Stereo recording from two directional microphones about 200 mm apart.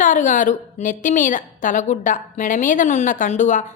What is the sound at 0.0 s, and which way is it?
A woman's voice, 40° left (ahead or behind).